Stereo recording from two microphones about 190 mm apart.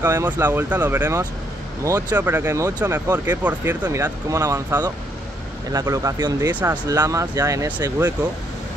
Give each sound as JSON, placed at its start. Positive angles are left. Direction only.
{"t": 0.0, "sound": "speech", "side_deg": -10}